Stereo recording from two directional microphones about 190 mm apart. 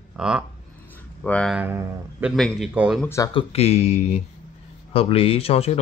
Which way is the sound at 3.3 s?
30° left (ahead or behind).